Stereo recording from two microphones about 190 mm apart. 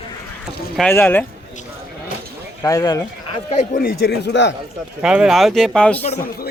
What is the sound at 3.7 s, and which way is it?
Speech, 50° left (ahead or behind).